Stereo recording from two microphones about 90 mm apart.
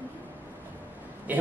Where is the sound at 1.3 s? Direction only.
15° right (ahead or behind).